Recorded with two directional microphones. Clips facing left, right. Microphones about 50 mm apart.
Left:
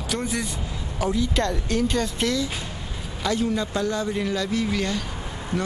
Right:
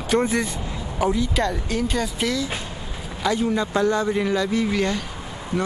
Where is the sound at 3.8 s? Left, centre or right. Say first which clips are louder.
Right 5 dB; right.